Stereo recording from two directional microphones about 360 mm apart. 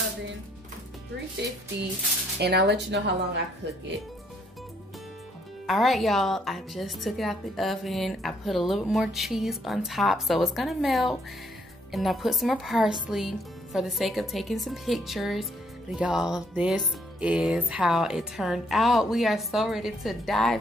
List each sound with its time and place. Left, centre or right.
2.4 s speech: right
5.7 s speech: centre